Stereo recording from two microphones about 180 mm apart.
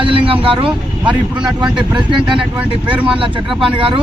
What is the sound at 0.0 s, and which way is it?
Vehicle, 30° right (ahead or behind).